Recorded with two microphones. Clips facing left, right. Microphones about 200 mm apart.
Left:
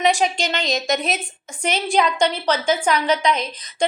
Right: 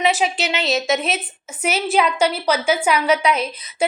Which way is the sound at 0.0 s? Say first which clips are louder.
Even; 5° right (ahead or behind).